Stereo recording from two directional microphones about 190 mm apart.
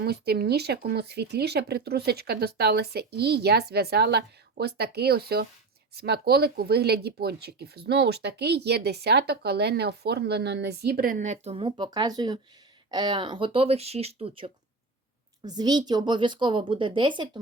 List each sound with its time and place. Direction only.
0.0 s speech: 55° right (ahead or behind); by 17.4 s 25° right (ahead or behind)